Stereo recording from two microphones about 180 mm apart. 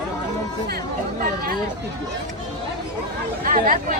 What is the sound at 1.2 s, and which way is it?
Speech, 55° right (ahead or behind).